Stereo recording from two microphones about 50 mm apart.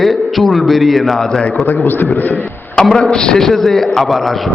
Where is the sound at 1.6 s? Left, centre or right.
Left.